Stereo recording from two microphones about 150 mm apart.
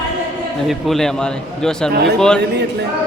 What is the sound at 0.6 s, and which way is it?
A man's voice, centre (ahead or behind).